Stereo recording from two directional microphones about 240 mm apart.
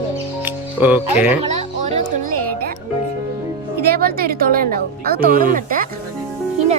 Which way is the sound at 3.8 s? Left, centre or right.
Right.